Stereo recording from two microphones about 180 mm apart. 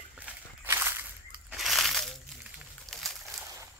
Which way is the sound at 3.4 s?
15° right (ahead or behind).